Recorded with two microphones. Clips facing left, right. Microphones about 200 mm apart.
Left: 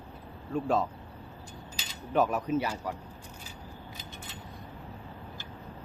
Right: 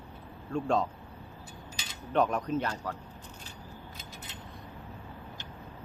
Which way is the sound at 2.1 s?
5° left (ahead or behind).